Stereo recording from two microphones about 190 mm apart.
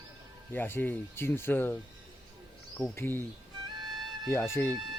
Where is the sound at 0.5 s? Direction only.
10° left (ahead or behind).